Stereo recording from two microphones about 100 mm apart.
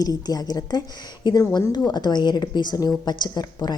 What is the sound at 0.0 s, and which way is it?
Speech, 40° left (ahead or behind).